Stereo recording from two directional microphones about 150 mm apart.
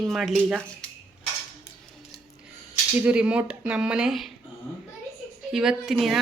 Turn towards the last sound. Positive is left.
turn(degrees=0)  # may be behind; listen again after turning